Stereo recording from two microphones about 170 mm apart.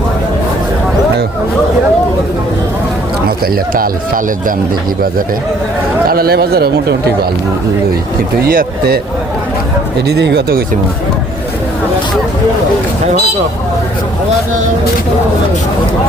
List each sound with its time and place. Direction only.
3.4 s speech: 60° right (ahead or behind)
6.1 s speech: 65° right (ahead or behind)
8.4 s speech: 60° right (ahead or behind)
10.1 s speech: 75° right (ahead or behind)